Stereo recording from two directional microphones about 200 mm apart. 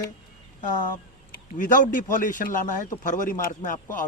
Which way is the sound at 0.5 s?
40° left (ahead or behind).